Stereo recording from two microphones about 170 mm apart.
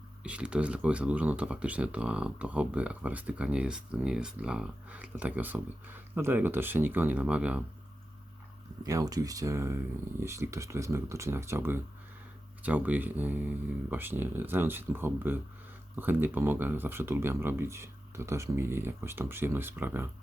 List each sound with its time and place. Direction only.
0.2 s speech: 5° right (ahead or behind)
8.8 s speech: 20° right (ahead or behind)